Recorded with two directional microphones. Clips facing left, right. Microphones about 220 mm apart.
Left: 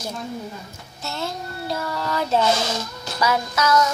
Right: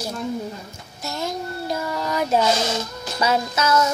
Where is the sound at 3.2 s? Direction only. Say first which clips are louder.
Right 1 dB; 25° right (ahead or behind).